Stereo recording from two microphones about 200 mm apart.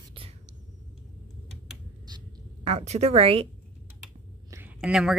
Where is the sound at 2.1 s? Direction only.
25° right (ahead or behind).